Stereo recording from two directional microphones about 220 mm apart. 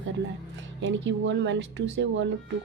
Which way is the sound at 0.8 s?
55° right (ahead or behind).